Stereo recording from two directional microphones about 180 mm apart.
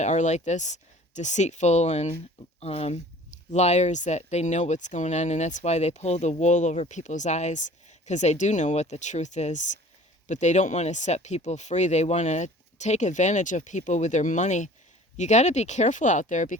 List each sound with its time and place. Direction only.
0.0 s speech: 40° left (ahead or behind)